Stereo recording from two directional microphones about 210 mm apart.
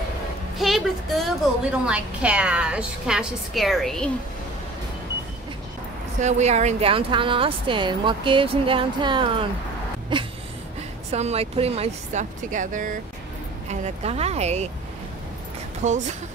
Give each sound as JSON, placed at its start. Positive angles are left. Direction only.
{"t": 0.6, "sound": "a woman's voice", "side_deg": 0}
{"t": 6.2, "sound": "a woman's voice", "side_deg": -35}
{"t": 10.1, "sound": "a sound", "side_deg": -20}
{"t": 11.1, "sound": "speech", "side_deg": -30}
{"t": 15.8, "sound": "speech", "side_deg": -35}